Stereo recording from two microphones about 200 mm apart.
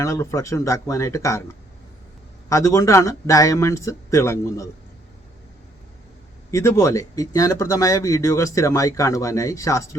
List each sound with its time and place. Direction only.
0.0 s speech: 15° left (ahead or behind)
2.5 s speech: 15° left (ahead or behind)
6.5 s speech: 15° left (ahead or behind)